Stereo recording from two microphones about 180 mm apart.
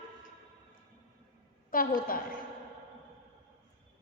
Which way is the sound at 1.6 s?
50° left (ahead or behind).